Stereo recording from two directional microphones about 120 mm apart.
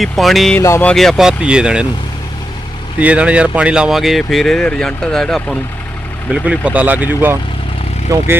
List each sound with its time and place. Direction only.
0.0 s speech: centre (ahead or behind)
0.6 s speech: 20° left (ahead or behind)
0.9 s speech: 5° left (ahead or behind)
3.0 s speech: 10° right (ahead or behind)
6.3 s speech: 10° right (ahead or behind)
8.1 s speech: 30° right (ahead or behind)